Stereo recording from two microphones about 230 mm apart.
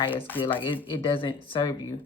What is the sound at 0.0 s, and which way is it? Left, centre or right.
Speech, left.